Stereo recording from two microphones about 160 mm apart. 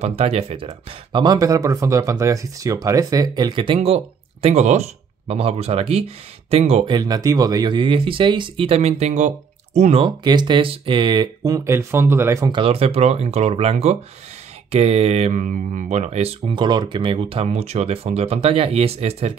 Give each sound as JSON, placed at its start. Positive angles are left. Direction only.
{"t": 0.0, "sound": "speech", "side_deg": -40}
{"t": 12.5, "sound": "speech", "side_deg": -35}